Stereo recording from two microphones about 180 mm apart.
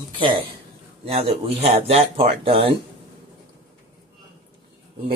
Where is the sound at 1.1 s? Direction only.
30° right (ahead or behind).